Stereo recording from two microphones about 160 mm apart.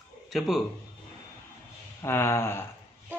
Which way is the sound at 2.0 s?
15° left (ahead or behind).